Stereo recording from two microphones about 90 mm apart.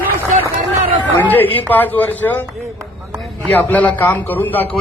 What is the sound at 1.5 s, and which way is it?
Speech, 20° left (ahead or behind).